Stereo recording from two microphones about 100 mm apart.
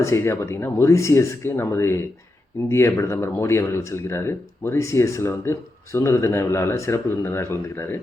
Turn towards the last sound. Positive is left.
turn(degrees=20)  # may be behind; listen again after turning